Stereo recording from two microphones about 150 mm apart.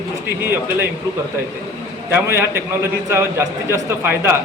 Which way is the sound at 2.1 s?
15° right (ahead or behind).